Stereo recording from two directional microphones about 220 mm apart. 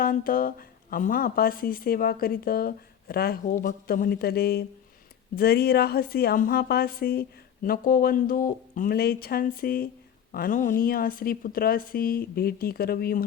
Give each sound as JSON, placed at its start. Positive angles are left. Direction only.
{"t": 0.0, "sound": "a woman's voice", "side_deg": 40}